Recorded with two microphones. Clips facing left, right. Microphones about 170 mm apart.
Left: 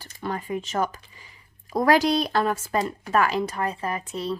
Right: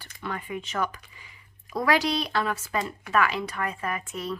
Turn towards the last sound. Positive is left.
turn(degrees=35)  # may be behind; listen again after turning